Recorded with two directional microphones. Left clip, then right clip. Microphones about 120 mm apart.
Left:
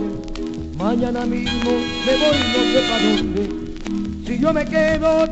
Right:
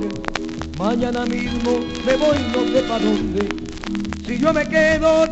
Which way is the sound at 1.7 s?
25° left (ahead or behind).